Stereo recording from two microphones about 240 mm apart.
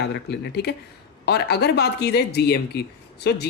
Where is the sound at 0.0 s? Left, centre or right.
Left.